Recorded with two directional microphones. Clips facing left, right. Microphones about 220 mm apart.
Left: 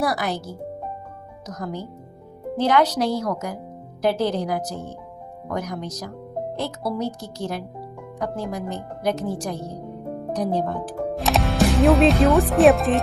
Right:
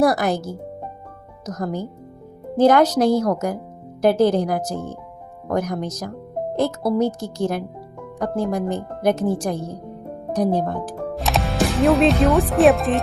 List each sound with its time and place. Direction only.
0.0 s speech: 45° right (ahead or behind)
11.1 s speech: centre (ahead or behind)